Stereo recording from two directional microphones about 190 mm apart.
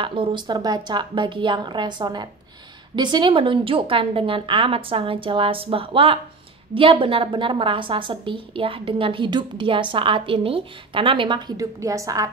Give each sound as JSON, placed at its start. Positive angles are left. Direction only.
{"t": 0.0, "sound": "a woman's voice", "side_deg": -25}